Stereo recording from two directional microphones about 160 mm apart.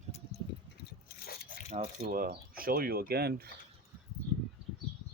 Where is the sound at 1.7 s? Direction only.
55° right (ahead or behind); by 3.5 s 80° right.